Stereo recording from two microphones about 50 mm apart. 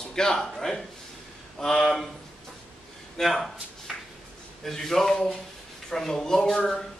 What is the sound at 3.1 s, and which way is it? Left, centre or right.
Speech, centre.